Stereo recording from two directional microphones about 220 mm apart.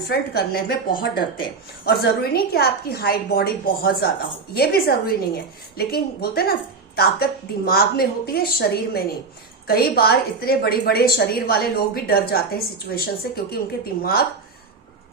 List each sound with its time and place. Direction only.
0.0 s a woman's voice: 45° left (ahead or behind)
1.9 s a woman's voice: 45° left (ahead or behind)